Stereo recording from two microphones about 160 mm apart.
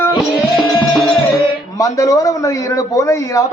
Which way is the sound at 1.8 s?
20° left (ahead or behind).